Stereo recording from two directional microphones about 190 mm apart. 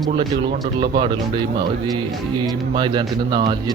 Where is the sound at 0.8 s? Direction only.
25° right (ahead or behind).